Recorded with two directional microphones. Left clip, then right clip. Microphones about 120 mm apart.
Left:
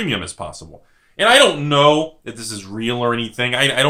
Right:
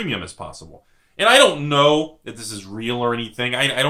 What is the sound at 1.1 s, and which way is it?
Speech, 15° left (ahead or behind).